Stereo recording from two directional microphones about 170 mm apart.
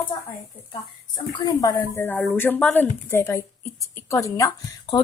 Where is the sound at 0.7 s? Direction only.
25° left (ahead or behind).